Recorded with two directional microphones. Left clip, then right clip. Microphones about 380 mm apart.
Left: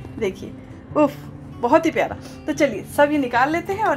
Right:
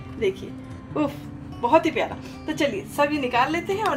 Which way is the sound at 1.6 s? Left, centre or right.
Centre.